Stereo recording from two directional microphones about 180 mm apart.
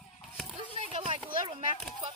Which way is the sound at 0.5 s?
30° right (ahead or behind).